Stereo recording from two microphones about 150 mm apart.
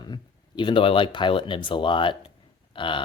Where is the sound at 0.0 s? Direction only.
30° left (ahead or behind).